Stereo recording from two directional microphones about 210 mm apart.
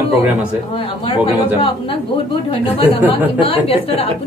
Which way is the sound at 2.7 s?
25° left (ahead or behind).